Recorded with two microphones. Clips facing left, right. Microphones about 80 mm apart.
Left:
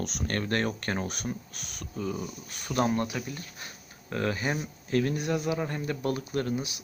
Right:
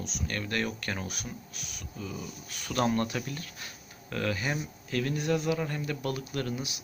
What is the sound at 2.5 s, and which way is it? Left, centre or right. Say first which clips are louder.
Speech: left 1 dB; left.